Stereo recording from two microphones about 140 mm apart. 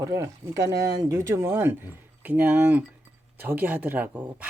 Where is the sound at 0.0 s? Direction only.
20° right (ahead or behind).